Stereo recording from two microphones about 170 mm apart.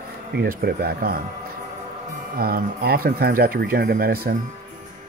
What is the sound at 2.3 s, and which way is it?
Speech, 60° right (ahead or behind).